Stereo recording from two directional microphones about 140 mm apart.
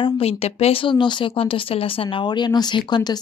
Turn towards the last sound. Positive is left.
turn(degrees=30)  # may be behind; listen again after turning